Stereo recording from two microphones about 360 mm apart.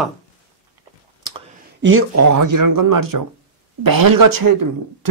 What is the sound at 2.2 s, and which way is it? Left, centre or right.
Speech, right.